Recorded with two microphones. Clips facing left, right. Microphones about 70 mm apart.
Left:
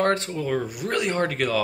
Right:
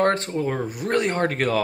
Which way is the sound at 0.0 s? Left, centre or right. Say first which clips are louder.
Right 2 dB; right.